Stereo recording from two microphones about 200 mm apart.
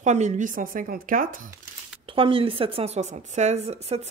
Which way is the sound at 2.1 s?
25° right (ahead or behind).